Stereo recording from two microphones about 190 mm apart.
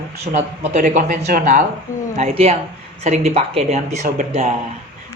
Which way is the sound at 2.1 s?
30° right (ahead or behind).